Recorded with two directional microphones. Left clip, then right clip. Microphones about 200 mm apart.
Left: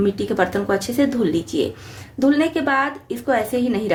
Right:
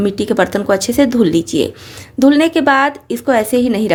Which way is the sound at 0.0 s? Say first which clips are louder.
Right 5 dB; 45° right (ahead or behind).